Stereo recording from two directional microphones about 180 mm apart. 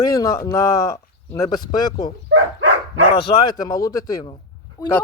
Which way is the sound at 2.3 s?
90° right.